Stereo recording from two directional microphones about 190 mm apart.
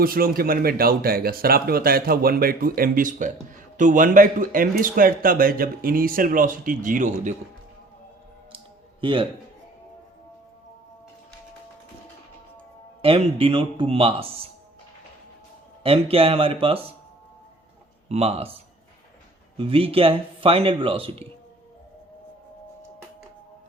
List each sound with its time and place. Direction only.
0.0 s a man's voice: 50° right (ahead or behind)
8.5 s clicking: 25° right (ahead or behind)
13.0 s speech: 30° right (ahead or behind)
15.8 s speech: 30° right (ahead or behind)
18.1 s speech: 30° right (ahead or behind)
19.5 s speech: 30° right (ahead or behind)